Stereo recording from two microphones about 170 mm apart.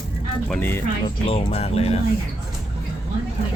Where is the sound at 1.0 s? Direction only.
35° left (ahead or behind).